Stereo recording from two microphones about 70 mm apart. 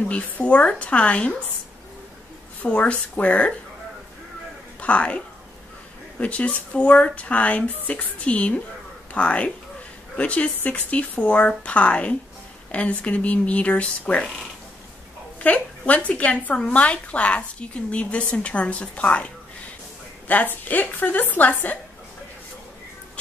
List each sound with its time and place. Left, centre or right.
0.1 s a woman's voice: centre
2.6 s a woman's voice: centre
4.7 s a woman's voice: centre
15.4 s a woman's voice: centre